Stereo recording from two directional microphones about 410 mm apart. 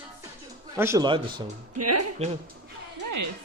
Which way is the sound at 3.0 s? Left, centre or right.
Right.